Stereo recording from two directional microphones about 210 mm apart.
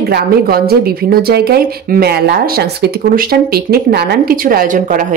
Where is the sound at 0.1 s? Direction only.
45° right (ahead or behind).